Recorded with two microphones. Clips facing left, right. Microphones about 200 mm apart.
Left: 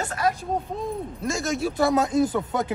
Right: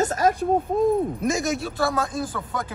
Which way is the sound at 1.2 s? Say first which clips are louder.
Right 4 dB; 20° right (ahead or behind).